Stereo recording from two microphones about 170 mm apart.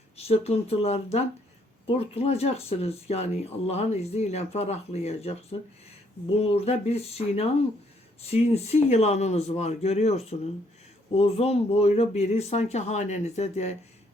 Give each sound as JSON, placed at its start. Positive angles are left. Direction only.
{"t": 0.2, "sound": "speech", "side_deg": 35}